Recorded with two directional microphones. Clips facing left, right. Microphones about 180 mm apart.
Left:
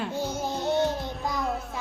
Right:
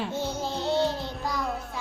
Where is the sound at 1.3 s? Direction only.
Centre (ahead or behind).